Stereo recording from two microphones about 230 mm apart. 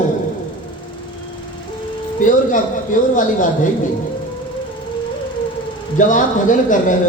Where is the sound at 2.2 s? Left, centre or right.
Left.